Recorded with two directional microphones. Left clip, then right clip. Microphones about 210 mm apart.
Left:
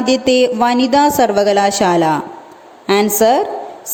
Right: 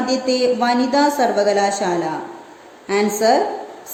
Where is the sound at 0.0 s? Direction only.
40° left (ahead or behind).